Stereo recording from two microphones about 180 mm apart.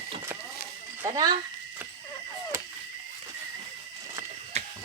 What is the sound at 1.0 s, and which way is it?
Speech, 20° right (ahead or behind).